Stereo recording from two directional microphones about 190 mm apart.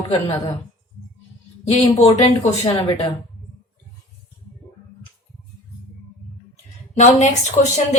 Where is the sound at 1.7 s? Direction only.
30° left (ahead or behind).